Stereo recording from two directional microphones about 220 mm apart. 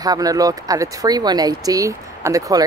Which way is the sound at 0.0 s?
15° right (ahead or behind).